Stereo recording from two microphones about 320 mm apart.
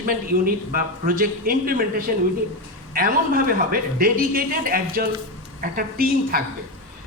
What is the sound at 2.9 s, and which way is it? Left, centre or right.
A man's voice, right.